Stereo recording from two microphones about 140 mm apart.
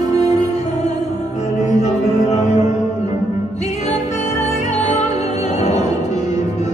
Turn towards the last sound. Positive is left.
turn(degrees=55)  # may be behind; listen again after turning